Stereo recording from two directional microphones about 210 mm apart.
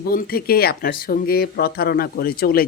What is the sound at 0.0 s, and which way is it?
Speech, 45° left (ahead or behind).